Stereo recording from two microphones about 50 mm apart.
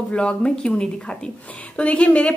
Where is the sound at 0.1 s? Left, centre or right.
Left.